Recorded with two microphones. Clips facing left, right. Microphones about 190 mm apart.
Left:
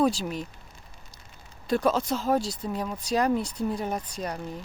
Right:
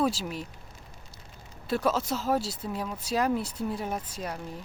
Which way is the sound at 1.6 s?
5° right (ahead or behind).